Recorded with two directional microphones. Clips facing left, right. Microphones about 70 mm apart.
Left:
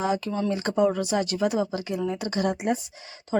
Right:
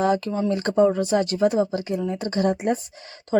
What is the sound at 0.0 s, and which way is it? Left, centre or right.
Speech, right.